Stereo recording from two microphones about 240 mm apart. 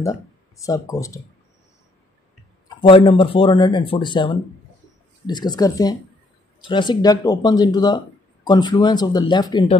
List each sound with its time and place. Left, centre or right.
0.0 s speech: centre
2.8 s speech: left